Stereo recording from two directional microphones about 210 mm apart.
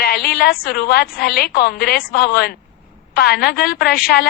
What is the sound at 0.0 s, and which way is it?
A woman's voice, 45° left (ahead or behind).